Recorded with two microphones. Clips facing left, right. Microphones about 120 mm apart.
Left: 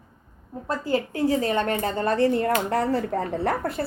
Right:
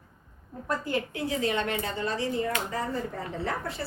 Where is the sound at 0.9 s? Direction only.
35° left (ahead or behind).